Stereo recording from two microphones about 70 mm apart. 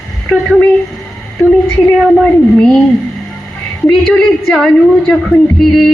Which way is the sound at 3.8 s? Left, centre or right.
Centre.